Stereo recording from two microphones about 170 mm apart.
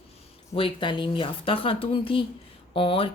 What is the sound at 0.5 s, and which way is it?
Speech, 30° left (ahead or behind).